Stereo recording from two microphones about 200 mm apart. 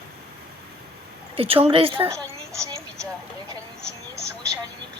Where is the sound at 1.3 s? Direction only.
30° right (ahead or behind).